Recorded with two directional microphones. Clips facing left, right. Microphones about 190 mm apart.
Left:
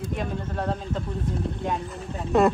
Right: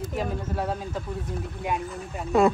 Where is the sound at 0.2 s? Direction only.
5° right (ahead or behind).